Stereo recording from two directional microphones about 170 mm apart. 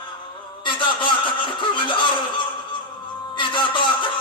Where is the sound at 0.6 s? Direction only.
30° left (ahead or behind).